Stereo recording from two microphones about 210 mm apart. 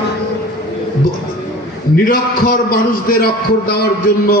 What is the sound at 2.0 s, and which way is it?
A man's voice, 45° left (ahead or behind).